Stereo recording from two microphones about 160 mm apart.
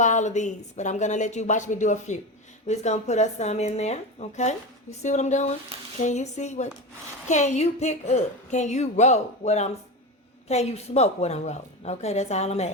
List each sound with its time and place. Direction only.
0.0 s speech: 50° left (ahead or behind)